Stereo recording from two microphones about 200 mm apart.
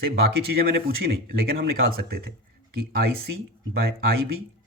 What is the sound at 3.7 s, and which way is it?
Speech, 50° right (ahead or behind).